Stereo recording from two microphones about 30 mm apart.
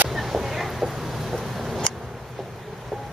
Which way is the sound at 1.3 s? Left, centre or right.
Centre.